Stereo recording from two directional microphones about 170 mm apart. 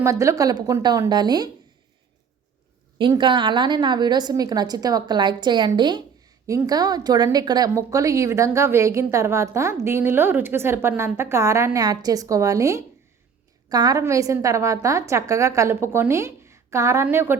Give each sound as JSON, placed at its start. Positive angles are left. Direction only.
{"t": 0.0, "sound": "a woman's voice", "side_deg": -15}
{"t": 3.0, "sound": "a woman's voice", "side_deg": -30}